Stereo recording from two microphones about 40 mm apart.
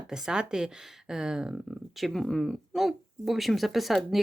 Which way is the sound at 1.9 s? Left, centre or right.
Centre.